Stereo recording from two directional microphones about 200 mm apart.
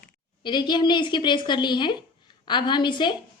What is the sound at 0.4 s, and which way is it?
A woman's voice, 20° left (ahead or behind).